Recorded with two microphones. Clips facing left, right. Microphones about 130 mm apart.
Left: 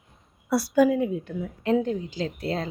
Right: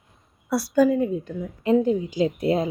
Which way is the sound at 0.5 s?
Centre (ahead or behind).